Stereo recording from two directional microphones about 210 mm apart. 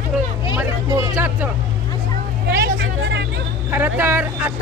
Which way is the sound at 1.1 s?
10° right (ahead or behind).